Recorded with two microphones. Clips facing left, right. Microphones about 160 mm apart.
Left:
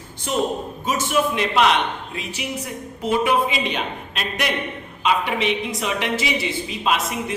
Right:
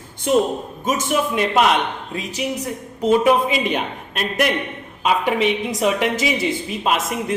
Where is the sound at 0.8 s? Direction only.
45° right (ahead or behind).